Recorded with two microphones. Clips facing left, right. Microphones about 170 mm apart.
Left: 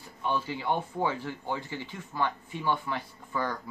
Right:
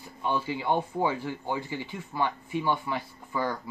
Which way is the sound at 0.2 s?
15° right (ahead or behind).